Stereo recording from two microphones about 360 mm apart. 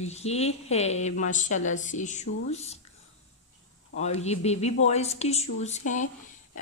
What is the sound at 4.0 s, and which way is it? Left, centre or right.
Speech, centre.